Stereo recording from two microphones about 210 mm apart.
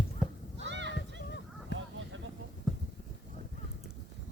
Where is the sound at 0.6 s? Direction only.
55° right (ahead or behind).